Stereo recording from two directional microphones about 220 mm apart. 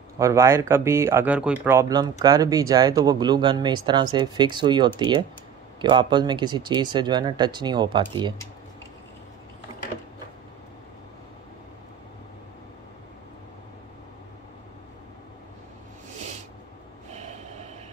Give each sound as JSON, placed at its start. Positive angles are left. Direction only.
{"t": 0.2, "sound": "speech", "side_deg": -15}
{"t": 17.1, "sound": "train", "side_deg": -30}